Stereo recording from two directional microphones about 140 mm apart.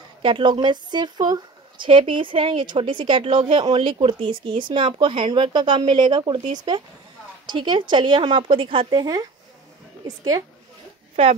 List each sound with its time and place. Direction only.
0.2 s speech: 35° right (ahead or behind)
7.4 s a woman's voice: 35° right (ahead or behind)